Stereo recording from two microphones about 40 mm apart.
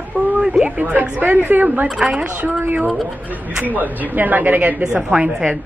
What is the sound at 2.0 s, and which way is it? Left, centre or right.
Speech, centre.